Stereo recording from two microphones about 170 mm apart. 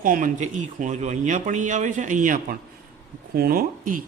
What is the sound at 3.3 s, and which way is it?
Speech, 60° right (ahead or behind).